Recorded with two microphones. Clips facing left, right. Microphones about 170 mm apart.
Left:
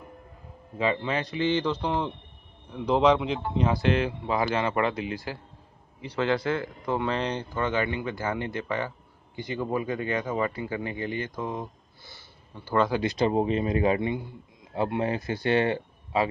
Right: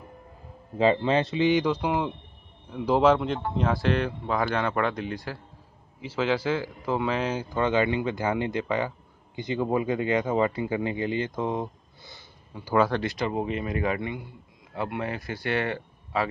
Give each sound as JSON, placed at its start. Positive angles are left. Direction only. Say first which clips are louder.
{"t": 0.7, "sound": "a man's voice", "louder": "right 5 dB", "side_deg": -30}
{"t": 1.5, "sound": "a man's voice", "louder": "right 2 dB", "side_deg": -10}
{"t": 7.4, "sound": "speech", "louder": "right 4 dB", "side_deg": -15}
{"t": 13.0, "sound": "speech", "louder": "left 4 dB", "side_deg": 25}